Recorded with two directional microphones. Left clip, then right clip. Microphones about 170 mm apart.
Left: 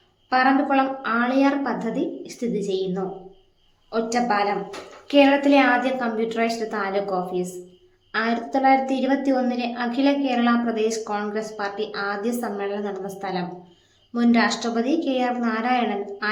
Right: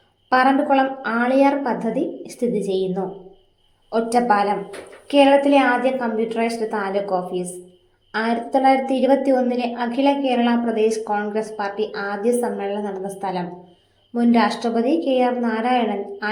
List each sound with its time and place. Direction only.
0.3 s a woman's voice: 15° right (ahead or behind)
3.9 s a woman's voice: 15° right (ahead or behind)